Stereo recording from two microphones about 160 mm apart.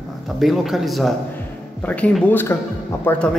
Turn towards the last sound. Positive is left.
turn(degrees=10)  # may be behind; listen again after turning